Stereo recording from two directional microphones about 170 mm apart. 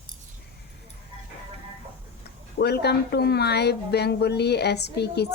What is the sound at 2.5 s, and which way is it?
Speech, 70° left (ahead or behind).